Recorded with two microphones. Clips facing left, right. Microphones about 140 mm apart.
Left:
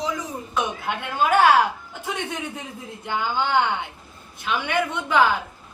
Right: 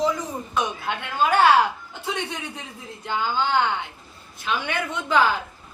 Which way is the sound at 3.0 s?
15° left (ahead or behind).